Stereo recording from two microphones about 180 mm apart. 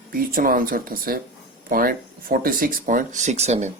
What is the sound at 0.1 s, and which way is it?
Speech, 55° right (ahead or behind).